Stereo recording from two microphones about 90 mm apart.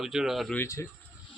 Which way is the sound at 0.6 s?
35° left (ahead or behind).